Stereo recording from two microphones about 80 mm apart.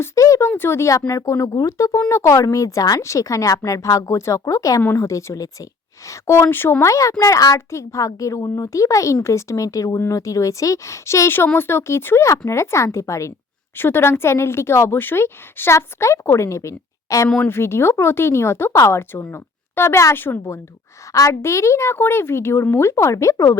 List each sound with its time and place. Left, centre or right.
0.0 s a woman's voice: left
1.9 s a woman's voice: left
6.8 s a woman's voice: left
9.6 s a woman's voice: left
13.7 s a woman's voice: left
21.1 s a woman's voice: left